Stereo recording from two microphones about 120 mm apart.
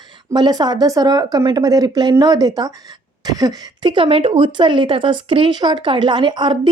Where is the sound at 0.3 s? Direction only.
35° right (ahead or behind).